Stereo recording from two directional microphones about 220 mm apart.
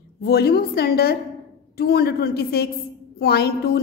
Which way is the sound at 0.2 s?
45° left (ahead or behind).